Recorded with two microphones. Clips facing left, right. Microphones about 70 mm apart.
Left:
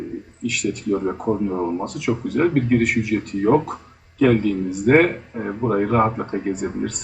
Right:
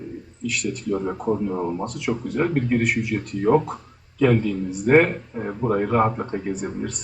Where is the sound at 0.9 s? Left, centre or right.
Centre.